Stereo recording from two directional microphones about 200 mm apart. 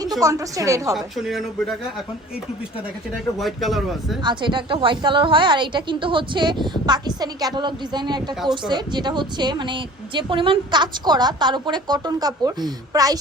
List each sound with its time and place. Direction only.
0.2 s a woman's voice: 15° right (ahead or behind)
0.9 s speech: centre (ahead or behind)
3.3 s speech: centre (ahead or behind)
4.2 s a woman's voice: 25° right (ahead or behind)